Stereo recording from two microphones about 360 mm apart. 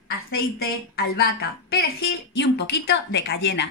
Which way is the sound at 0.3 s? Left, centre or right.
Left.